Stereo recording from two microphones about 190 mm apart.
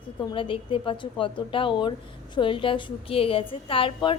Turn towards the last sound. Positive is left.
turn(degrees=30)  # may be behind; listen again after turning